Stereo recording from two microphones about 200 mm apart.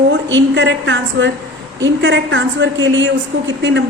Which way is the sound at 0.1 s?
65° right (ahead or behind).